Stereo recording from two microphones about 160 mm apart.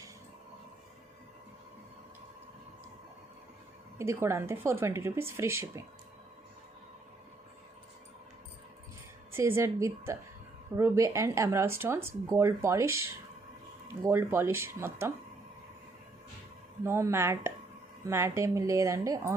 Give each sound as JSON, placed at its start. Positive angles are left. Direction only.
{"t": 3.9, "sound": "speech", "side_deg": -15}
{"t": 9.3, "sound": "speech", "side_deg": -15}
{"t": 16.8, "sound": "a woman's voice", "side_deg": -15}